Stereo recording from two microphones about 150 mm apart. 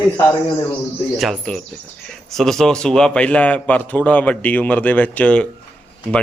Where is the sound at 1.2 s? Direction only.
Centre (ahead or behind).